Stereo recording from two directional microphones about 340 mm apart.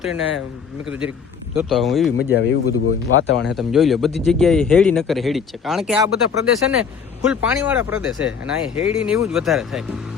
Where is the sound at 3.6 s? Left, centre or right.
Centre.